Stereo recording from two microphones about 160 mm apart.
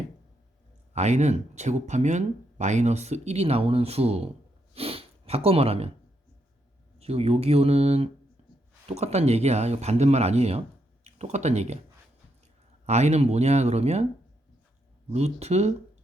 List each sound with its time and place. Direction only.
0.9 s speech: 45° right (ahead or behind)
4.7 s sniff: 35° right (ahead or behind)
7.0 s speech: 40° right (ahead or behind)
12.8 s speech: 45° right (ahead or behind)
15.1 s speech: 40° right (ahead or behind)